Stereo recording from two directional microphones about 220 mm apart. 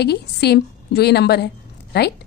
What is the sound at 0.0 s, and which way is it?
A woman's voice, 50° left (ahead or behind).